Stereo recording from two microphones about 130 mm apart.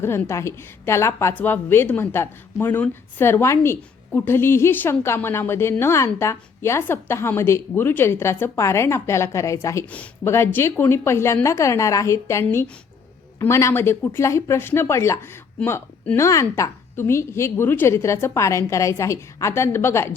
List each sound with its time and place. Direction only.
0.0 s speech: 20° left (ahead or behind)